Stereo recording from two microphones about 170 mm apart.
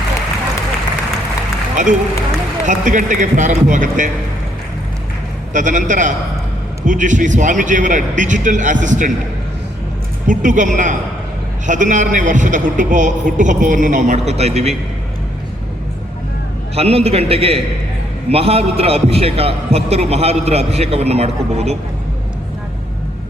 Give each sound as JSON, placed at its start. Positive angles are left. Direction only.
{"t": 1.7, "sound": "a man's voice", "side_deg": -45}
{"t": 5.5, "sound": "a man's voice", "side_deg": -50}
{"t": 10.2, "sound": "a man's voice", "side_deg": -50}
{"t": 16.7, "sound": "a man's voice", "side_deg": -35}